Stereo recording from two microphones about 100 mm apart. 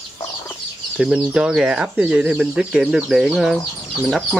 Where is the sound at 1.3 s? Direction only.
10° right (ahead or behind).